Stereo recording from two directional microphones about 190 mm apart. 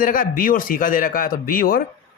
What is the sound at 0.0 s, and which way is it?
Speech, 45° left (ahead or behind).